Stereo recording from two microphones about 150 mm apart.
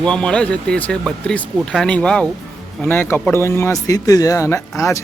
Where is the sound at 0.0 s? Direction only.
5° left (ahead or behind).